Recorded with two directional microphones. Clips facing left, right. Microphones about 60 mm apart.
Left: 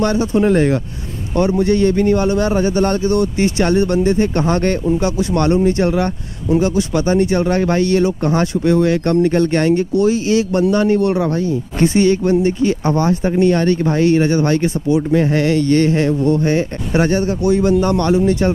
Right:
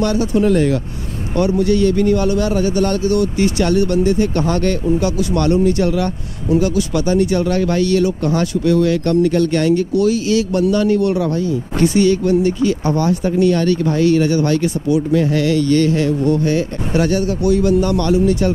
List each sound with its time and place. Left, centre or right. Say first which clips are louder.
0.0 s speech: left 1 dB; left